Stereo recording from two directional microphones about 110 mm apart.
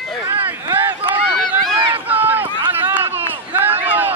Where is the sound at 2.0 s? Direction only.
15° right (ahead or behind).